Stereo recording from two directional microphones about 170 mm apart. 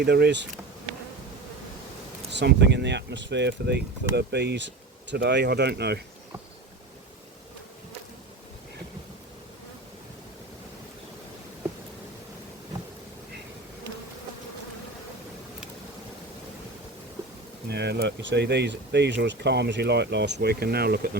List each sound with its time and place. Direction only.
0.0 s speech: 70° right (ahead or behind)
2.3 s speech: 85° right
17.7 s speech: 80° right